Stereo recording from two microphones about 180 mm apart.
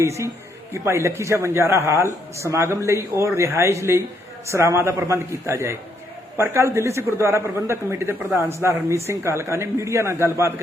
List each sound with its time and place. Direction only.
0.0 s a man's voice: 15° right (ahead or behind)